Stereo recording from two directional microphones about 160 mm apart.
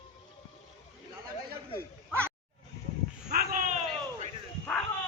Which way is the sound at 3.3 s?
75° right (ahead or behind).